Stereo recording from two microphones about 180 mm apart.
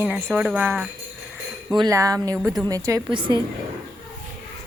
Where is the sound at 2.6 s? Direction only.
20° right (ahead or behind).